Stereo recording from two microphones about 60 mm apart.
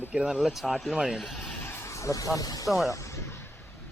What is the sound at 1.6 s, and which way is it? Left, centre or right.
Speech, left.